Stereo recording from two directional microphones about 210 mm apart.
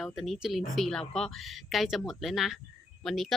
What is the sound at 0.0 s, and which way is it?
Speech, centre (ahead or behind).